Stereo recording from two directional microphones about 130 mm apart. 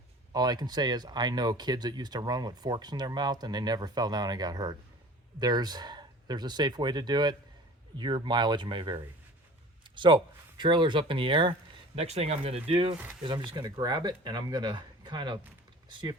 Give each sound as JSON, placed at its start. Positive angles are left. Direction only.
{"t": 0.3, "sound": "speech", "side_deg": -30}
{"t": 11.9, "sound": "speech", "side_deg": -55}
{"t": 13.2, "sound": "speech", "side_deg": -40}